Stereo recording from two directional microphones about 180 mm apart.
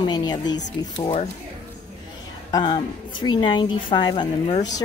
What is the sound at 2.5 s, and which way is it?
A woman's voice, 25° left (ahead or behind).